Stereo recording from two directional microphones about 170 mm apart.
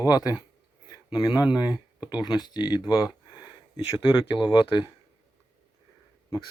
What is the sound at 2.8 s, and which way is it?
Speech, 5° right (ahead or behind).